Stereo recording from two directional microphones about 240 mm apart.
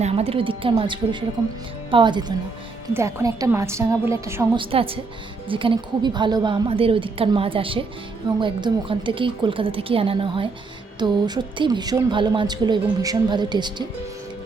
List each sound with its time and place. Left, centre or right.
0.0 s a woman's voice: right
4.6 s a woman's voice: right